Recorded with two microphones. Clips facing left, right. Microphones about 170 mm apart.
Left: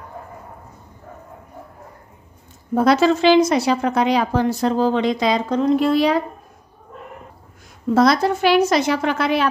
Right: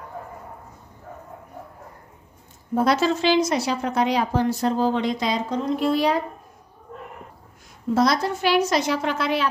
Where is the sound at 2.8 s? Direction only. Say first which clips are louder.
Left 5 dB; 90° left.